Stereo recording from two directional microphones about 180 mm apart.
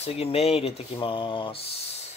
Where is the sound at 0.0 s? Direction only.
35° left (ahead or behind).